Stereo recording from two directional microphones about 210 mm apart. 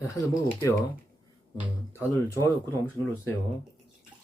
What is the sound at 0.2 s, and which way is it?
Speech, 15° left (ahead or behind).